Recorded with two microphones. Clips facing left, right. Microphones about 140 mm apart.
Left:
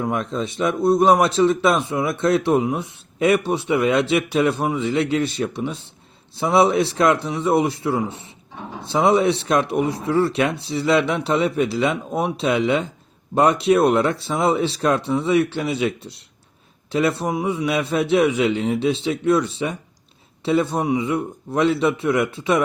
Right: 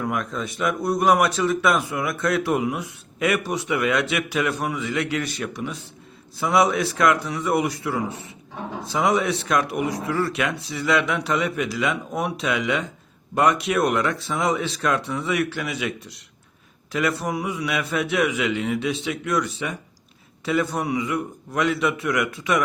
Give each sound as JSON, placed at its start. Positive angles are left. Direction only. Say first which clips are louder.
{"t": 0.0, "sound": "speech", "louder": "left 3 dB", "side_deg": 25}